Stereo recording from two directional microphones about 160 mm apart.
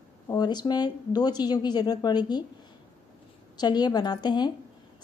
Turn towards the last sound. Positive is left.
turn(degrees=25)  # may be behind; listen again after turning